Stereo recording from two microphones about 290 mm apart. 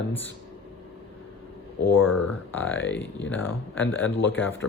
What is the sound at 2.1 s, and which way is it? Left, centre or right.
Speech, left.